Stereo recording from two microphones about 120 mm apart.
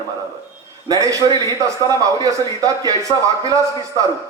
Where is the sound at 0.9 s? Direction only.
30° right (ahead or behind).